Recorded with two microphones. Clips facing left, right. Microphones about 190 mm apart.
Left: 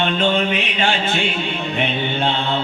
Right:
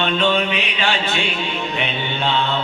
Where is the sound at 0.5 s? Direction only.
45° left (ahead or behind).